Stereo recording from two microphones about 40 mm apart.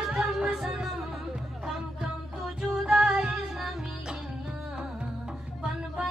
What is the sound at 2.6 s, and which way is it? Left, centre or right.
Music, centre.